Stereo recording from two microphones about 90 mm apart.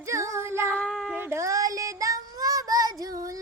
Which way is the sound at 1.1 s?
25° right (ahead or behind).